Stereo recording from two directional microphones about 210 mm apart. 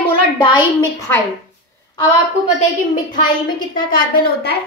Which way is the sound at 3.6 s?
40° left (ahead or behind).